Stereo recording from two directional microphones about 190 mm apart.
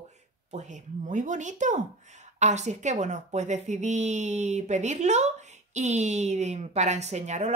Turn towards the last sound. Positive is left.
turn(degrees=-35)  # may be behind; listen again after turning